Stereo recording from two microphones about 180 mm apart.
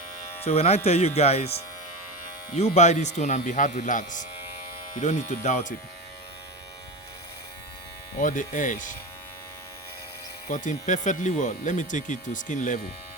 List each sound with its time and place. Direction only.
0.4 s speech: 35° left (ahead or behind)
8.2 s speech: 45° left (ahead or behind)
10.5 s speech: 45° left (ahead or behind)